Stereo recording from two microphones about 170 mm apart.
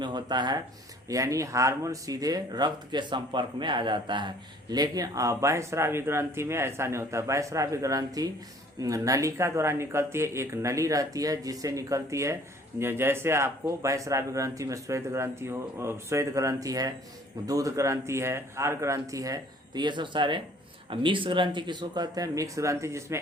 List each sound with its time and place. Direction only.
0.0 s speech: 25° right (ahead or behind)